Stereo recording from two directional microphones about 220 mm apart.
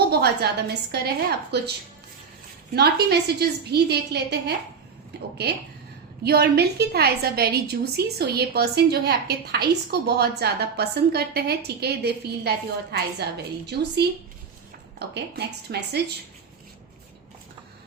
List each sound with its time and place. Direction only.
0.1 s a woman's voice: 45° right (ahead or behind)
2.7 s a woman's voice: 50° right (ahead or behind)